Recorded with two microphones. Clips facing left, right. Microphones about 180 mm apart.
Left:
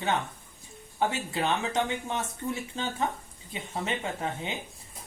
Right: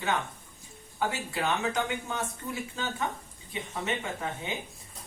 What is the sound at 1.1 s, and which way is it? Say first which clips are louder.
Speech: left 2 dB; 25° left (ahead or behind).